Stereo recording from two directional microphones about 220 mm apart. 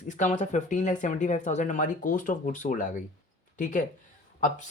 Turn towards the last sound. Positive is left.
turn(degrees=35)  # may be behind; listen again after turning